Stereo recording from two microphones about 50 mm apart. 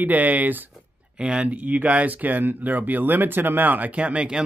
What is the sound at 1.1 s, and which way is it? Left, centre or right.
Speech, right.